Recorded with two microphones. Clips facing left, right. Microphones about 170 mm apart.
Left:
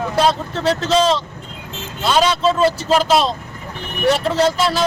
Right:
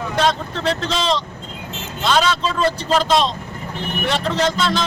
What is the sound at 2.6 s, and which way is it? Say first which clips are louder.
Speech: left 3 dB; 5° left (ahead or behind).